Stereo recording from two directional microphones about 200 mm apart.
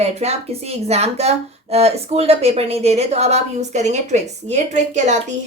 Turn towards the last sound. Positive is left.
turn(degrees=-35)  # may be behind; listen again after turning